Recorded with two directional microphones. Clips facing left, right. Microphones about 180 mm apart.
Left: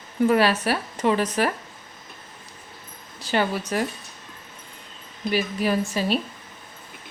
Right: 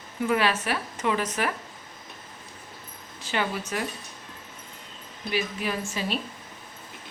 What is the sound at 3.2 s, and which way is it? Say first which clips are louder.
Speech: left 5 dB; 35° left (ahead or behind).